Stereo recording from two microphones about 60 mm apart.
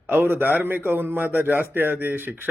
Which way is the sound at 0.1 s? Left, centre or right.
Right.